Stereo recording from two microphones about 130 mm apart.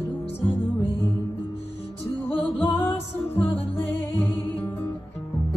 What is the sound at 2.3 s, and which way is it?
Music, 15° left (ahead or behind).